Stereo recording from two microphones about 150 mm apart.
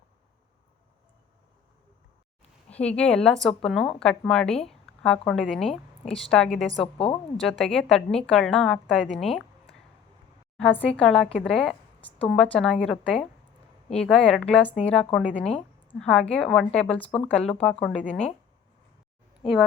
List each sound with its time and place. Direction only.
2.6 s a woman's voice: 10° left (ahead or behind)
6.8 s speech: 40° left (ahead or behind)
7.3 s a woman's voice: centre (ahead or behind)
10.6 s a woman's voice: 10° left (ahead or behind)